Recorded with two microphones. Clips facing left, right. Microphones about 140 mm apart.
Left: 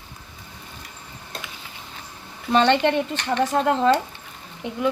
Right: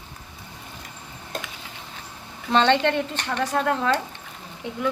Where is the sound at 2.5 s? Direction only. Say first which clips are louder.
Left 1 dB; 10° left (ahead or behind).